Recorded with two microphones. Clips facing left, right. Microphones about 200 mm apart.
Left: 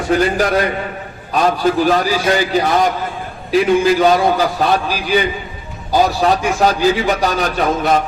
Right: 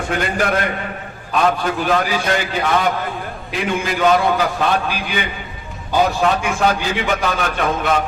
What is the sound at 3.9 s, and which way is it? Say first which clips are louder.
A man's voice: left 3 dB; 35° left (ahead or behind).